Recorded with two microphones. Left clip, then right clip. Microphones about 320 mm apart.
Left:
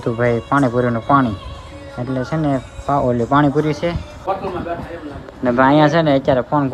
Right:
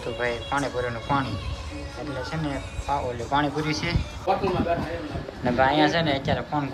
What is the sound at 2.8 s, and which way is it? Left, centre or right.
Speech, left.